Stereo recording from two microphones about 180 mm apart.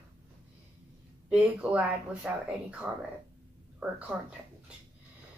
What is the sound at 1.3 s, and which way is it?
Speech, 5° right (ahead or behind).